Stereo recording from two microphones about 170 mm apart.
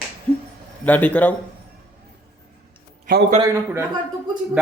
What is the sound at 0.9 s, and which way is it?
Speech, 10° left (ahead or behind).